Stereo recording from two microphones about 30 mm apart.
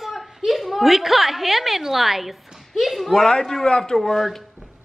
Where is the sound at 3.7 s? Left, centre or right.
Left.